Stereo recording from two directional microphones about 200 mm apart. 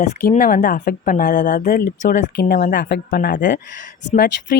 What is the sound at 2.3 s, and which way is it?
Speech, 55° left (ahead or behind).